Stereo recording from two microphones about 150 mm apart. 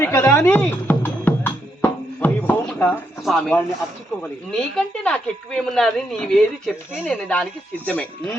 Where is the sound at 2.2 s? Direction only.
10° left (ahead or behind).